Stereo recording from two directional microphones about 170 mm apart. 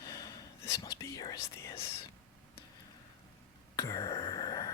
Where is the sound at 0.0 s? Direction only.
20° left (ahead or behind).